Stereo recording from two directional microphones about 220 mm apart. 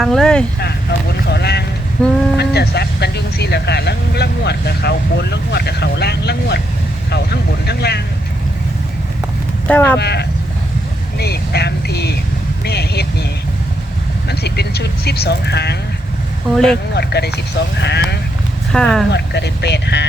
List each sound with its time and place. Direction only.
0.0 s speech: centre (ahead or behind)
0.6 s vehicle: 50° left (ahead or behind)
2.0 s speech: 5° left (ahead or behind)
2.4 s speech: 50° left (ahead or behind)
9.6 s speech: 10° left (ahead or behind)
10.0 s speech: 50° left (ahead or behind)
14.3 s speech: 50° left (ahead or behind)
16.9 s speech: 50° left (ahead or behind)
18.7 s speech: 5° left (ahead or behind)
19.1 s speech: 50° left (ahead or behind)